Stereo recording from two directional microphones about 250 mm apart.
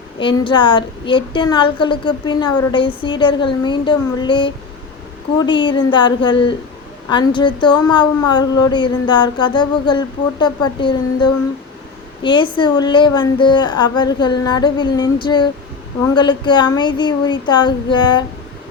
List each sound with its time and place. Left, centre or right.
0.4 s a woman's voice: centre